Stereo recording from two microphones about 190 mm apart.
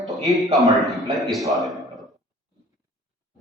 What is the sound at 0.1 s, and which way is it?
A man's voice, centre (ahead or behind).